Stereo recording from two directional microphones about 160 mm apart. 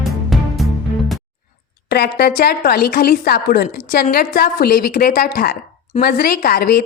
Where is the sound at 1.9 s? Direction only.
90° left.